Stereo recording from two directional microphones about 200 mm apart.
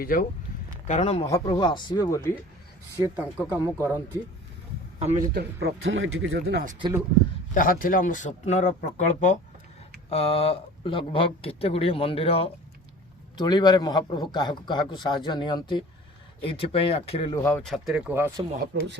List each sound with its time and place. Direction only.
0.0 s speech: 45° left (ahead or behind)
0.9 s a man's voice: 30° left (ahead or behind); by 2.4 s 15° left (ahead or behind)
3.0 s speech: 5° right (ahead or behind)
5.3 s speech: 55° right (ahead or behind)
5.8 s speech: 80° right; by 6.7 s 50° right (ahead or behind)
7.5 s a man's voice: 45° left (ahead or behind); by 17.6 s 15° left (ahead or behind)
17.6 s speech: centre (ahead or behind)
18.1 s speech: 10° right (ahead or behind)
18.7 s speech: 60° right (ahead or behind)